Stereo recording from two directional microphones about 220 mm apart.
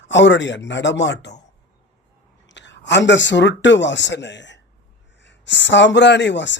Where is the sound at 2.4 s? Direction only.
55° left (ahead or behind).